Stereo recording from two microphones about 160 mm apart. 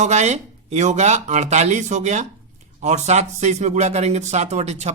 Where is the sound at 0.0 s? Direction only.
45° right (ahead or behind).